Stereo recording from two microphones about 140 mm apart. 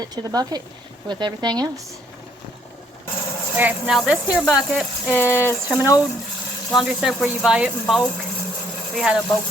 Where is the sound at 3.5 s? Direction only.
10° right (ahead or behind).